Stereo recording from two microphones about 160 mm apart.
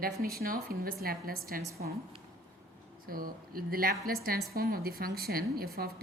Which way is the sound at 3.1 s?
65° right (ahead or behind).